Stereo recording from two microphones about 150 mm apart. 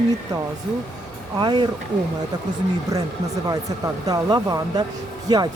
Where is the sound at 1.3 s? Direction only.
30° right (ahead or behind).